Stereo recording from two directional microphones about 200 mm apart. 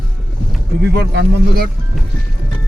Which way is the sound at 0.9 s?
55° right (ahead or behind).